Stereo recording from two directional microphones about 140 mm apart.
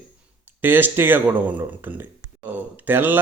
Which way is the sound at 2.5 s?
15° right (ahead or behind).